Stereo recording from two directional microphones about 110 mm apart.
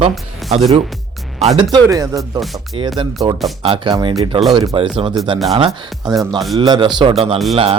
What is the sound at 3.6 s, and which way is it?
Speech, 50° right (ahead or behind).